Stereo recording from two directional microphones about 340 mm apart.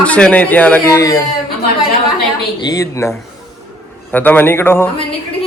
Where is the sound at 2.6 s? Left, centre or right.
Centre.